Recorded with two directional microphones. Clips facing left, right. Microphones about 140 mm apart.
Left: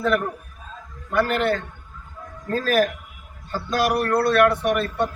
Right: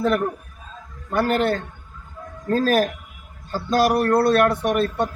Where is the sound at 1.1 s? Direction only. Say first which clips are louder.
Right 1 dB; 35° right (ahead or behind).